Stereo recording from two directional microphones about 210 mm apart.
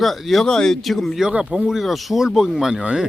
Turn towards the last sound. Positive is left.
turn(degrees=-5)  # may be behind; listen again after turning